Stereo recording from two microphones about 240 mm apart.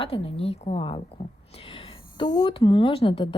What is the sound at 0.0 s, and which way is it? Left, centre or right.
A woman's voice, left.